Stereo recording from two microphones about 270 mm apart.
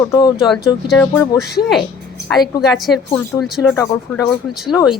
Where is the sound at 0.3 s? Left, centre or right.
Centre.